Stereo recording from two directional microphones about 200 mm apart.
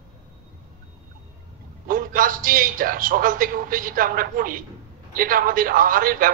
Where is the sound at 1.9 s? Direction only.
45° right (ahead or behind).